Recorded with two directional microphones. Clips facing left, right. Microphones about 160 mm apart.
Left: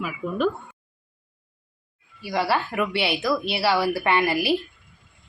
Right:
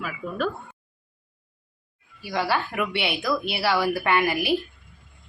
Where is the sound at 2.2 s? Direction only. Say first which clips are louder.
Left 2 dB; centre (ahead or behind).